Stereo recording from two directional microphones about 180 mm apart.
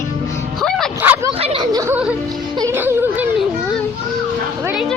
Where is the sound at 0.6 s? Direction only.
5° left (ahead or behind).